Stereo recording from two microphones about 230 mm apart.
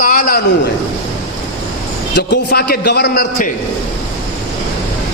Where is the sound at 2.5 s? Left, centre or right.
Left.